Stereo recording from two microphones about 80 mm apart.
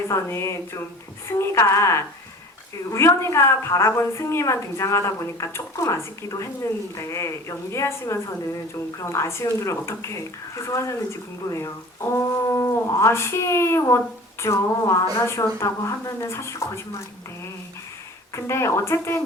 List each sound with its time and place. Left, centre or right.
0.1 s a woman's voice: left
18.3 s a woman's voice: left